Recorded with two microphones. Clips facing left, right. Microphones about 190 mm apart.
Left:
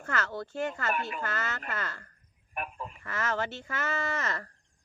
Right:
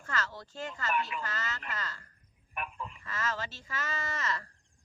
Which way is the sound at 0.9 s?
50° left (ahead or behind).